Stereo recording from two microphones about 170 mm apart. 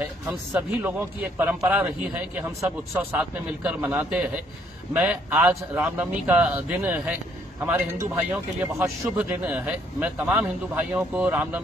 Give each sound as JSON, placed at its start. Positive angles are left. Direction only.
{"t": 0.0, "sound": "a man's voice", "side_deg": -10}